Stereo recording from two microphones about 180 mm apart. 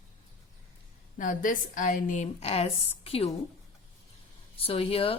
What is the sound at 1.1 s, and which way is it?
A woman's voice, 45° left (ahead or behind).